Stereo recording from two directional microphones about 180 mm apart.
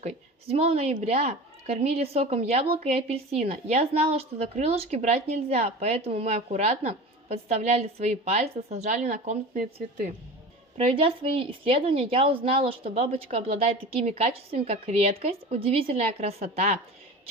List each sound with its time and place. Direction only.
0.0 s a woman's voice: 35° right (ahead or behind)
10.8 s a woman's voice: 30° right (ahead or behind)